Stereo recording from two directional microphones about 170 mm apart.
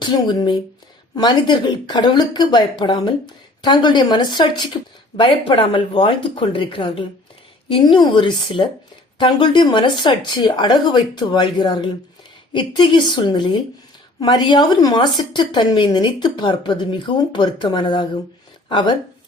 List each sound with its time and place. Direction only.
0.0 s speech: 25° left (ahead or behind)